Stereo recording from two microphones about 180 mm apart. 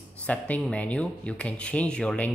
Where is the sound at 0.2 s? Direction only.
5° left (ahead or behind).